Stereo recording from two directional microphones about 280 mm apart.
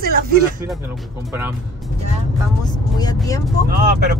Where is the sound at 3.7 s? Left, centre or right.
Right.